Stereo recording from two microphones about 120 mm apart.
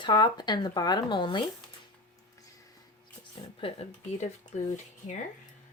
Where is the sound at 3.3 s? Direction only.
50° left (ahead or behind).